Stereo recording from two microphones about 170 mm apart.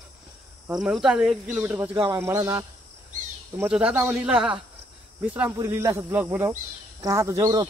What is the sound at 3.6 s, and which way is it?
Speech, 5° right (ahead or behind).